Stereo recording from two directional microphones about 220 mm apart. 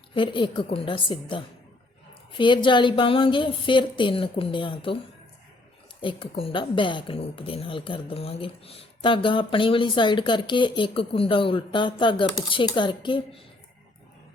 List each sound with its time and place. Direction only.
0.1 s a woman's voice: 20° left (ahead or behind)
6.0 s a woman's voice: 25° left (ahead or behind)